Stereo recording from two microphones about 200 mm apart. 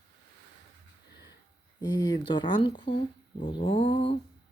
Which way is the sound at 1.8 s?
20° left (ahead or behind).